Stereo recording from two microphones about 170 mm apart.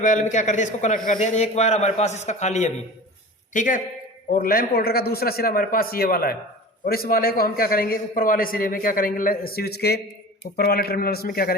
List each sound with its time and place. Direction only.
0.0 s a man's voice: 45° left (ahead or behind); by 11.5 s 65° left (ahead or behind)